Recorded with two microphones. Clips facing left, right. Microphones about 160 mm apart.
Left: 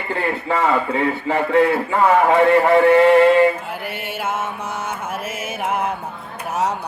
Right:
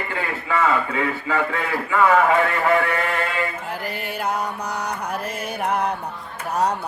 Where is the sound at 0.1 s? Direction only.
35° left (ahead or behind).